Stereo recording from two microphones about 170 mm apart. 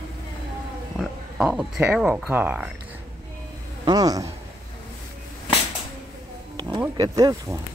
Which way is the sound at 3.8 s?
25° right (ahead or behind).